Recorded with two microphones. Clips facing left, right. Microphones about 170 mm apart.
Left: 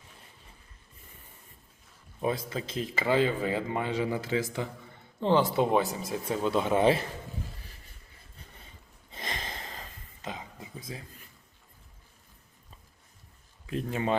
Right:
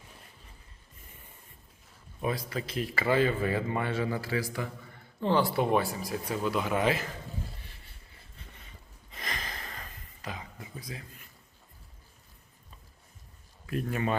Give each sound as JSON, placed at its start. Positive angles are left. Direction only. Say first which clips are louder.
{"t": 2.2, "sound": "speech", "louder": "left 2 dB", "side_deg": 25}
{"t": 9.1, "sound": "a sound", "louder": "left 2 dB", "side_deg": 25}
{"t": 13.7, "sound": "speech", "louder": "left 1 dB", "side_deg": 25}